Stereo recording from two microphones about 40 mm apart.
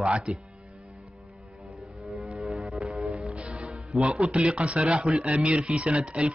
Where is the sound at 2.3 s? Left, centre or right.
Centre.